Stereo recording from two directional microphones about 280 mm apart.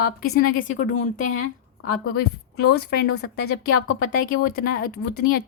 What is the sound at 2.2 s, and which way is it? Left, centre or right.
Speech, left.